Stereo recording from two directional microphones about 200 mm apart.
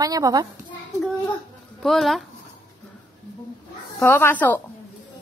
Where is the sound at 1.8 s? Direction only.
Centre (ahead or behind).